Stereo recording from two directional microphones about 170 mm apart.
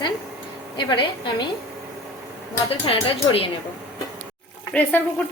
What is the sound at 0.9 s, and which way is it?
Speech, 25° left (ahead or behind).